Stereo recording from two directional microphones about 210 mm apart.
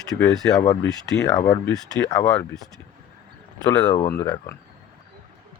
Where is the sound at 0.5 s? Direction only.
15° left (ahead or behind).